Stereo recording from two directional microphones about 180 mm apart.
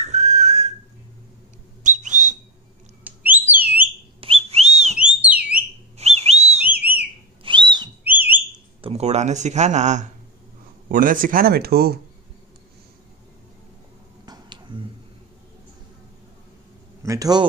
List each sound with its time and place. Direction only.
0.0 s whistling: 40° right (ahead or behind)
1.8 s whistle: 45° right (ahead or behind)
3.0 s whistle: 10° right (ahead or behind)
4.2 s whistling: 30° right (ahead or behind)
4.9 s whistle: 5° right (ahead or behind)
5.9 s bird: 35° right (ahead or behind)
6.6 s whistle: 10° right (ahead or behind)
7.4 s whistle: 25° right (ahead or behind)
8.0 s bird: 10° right (ahead or behind)
8.8 s speech: 35° right (ahead or behind); by 12.0 s 60° right (ahead or behind)
14.2 s a sound: 25° right (ahead or behind)
17.0 s a man's voice: 20° right (ahead or behind)